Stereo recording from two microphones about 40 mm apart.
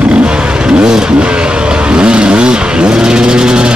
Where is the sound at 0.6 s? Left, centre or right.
Centre.